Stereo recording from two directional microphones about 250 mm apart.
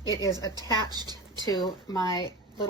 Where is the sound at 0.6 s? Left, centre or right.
Centre.